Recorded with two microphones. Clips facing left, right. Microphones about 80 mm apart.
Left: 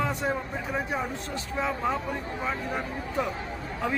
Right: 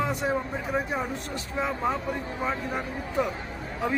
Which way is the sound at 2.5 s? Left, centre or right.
Centre.